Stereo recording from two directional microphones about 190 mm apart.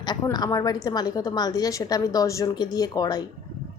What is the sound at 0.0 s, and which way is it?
A woman's voice, 20° left (ahead or behind).